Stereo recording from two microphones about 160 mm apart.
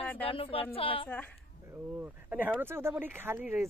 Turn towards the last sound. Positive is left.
turn(degrees=-15)  # may be behind; listen again after turning